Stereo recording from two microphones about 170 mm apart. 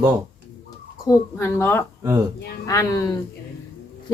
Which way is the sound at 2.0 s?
20° right (ahead or behind).